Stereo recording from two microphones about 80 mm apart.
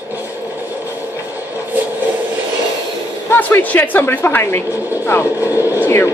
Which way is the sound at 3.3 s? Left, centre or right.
Left.